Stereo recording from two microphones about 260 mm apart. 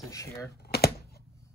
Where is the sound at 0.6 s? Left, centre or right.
Left.